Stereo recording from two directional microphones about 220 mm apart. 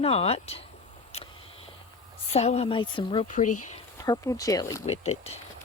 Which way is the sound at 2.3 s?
30° left (ahead or behind).